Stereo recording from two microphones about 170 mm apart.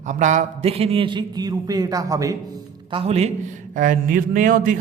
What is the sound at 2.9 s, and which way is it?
Speech, 35° right (ahead or behind).